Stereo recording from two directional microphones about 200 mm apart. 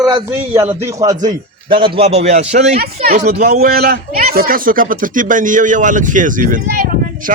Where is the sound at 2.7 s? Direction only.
50° right (ahead or behind).